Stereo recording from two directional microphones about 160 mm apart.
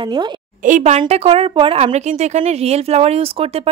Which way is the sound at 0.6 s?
50° right (ahead or behind).